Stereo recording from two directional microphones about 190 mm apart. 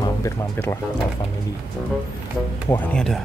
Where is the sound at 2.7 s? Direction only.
5° left (ahead or behind).